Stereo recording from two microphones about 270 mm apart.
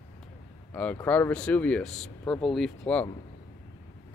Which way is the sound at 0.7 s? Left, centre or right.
Centre.